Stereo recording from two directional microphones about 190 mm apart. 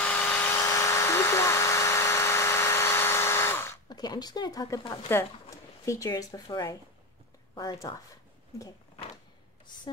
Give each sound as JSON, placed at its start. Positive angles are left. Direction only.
{"t": 0.0, "sound": "electric toothbrush", "side_deg": 10}
{"t": 7.5, "sound": "speech", "side_deg": 20}